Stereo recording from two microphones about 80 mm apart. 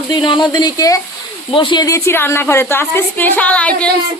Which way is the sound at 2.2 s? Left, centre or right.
Left.